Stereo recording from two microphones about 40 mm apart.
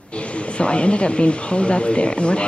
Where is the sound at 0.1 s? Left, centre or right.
Left.